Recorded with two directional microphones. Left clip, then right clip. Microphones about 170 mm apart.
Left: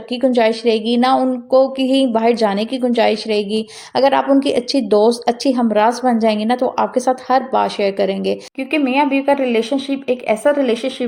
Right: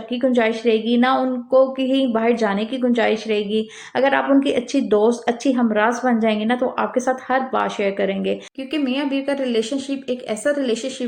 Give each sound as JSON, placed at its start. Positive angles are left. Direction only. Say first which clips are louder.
{"t": 0.1, "sound": "a woman's voice", "louder": "left 4 dB", "side_deg": 40}
{"t": 9.3, "sound": "speech", "louder": "left 5 dB", "side_deg": 15}